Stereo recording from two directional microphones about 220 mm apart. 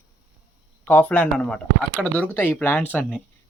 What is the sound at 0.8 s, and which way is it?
Speech, 5° left (ahead or behind).